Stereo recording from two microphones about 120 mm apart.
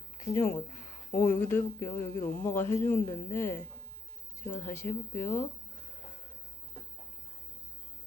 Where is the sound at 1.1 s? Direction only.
20° left (ahead or behind).